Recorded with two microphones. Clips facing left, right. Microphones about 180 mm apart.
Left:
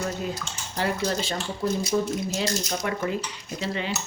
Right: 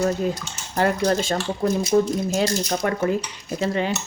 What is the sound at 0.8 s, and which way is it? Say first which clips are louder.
Speech: right 6 dB; 50° right (ahead or behind).